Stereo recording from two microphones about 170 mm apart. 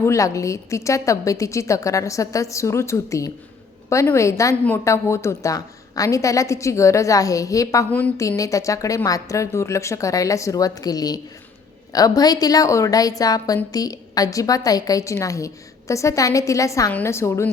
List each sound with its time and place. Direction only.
0.0 s a woman's voice: 20° left (ahead or behind)
7.9 s a woman's voice: 10° left (ahead or behind)